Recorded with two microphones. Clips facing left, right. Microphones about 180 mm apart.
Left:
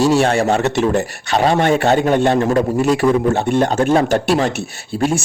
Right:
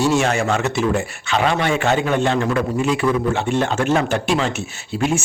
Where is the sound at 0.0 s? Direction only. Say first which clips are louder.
Left 4 dB; 35° left (ahead or behind).